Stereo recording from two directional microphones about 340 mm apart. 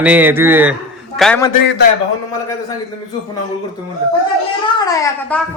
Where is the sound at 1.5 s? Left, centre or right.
Left.